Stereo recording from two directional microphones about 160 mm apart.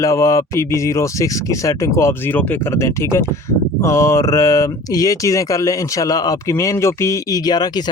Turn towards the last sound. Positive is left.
turn(degrees=25)  # may be behind; listen again after turning